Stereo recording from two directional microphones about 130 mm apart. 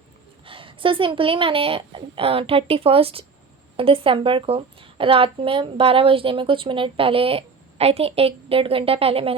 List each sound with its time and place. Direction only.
0.4 s speech: 40° right (ahead or behind)